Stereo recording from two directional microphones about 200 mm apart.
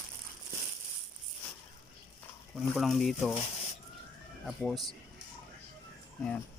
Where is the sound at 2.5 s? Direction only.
Centre (ahead or behind).